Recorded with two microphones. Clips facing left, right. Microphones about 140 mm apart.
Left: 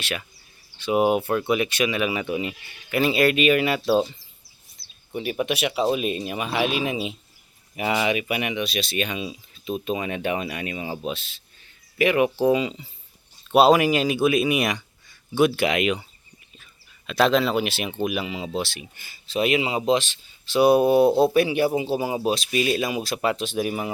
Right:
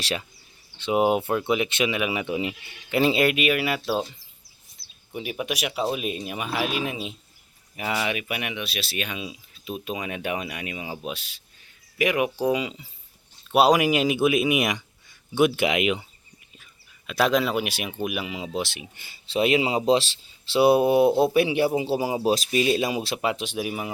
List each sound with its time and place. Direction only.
0.0 s speech: 30° right (ahead or behind)
0.8 s speech: 20° right (ahead or behind)
3.3 s speech: 5° right (ahead or behind)
5.1 s speech: 5° right (ahead or behind)
17.1 s speech: 10° right (ahead or behind)